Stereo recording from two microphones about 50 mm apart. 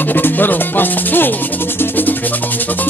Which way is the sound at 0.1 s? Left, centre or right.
Left.